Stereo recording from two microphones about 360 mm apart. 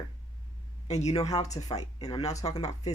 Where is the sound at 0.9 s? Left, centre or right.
Centre.